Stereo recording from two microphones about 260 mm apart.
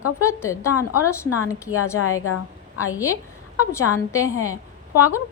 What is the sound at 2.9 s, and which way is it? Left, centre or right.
A woman's voice, centre.